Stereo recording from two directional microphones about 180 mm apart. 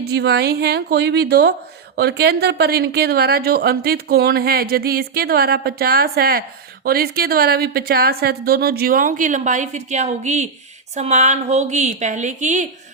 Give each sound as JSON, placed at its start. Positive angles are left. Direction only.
{"t": 0.0, "sound": "a woman's voice", "side_deg": -65}